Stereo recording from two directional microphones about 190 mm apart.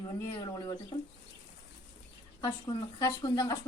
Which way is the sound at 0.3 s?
25° left (ahead or behind).